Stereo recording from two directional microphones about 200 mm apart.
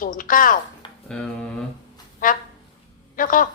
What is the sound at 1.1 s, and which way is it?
Speech, 5° left (ahead or behind).